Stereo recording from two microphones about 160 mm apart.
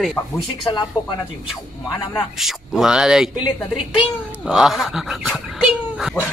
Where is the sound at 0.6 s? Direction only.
30° left (ahead or behind).